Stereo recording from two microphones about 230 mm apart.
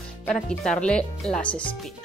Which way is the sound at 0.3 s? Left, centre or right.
Centre.